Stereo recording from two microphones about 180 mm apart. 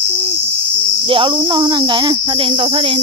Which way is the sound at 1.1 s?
30° right (ahead or behind).